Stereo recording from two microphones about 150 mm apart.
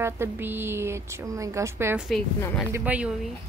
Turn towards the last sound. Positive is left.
turn(degrees=-10)  # may be behind; listen again after turning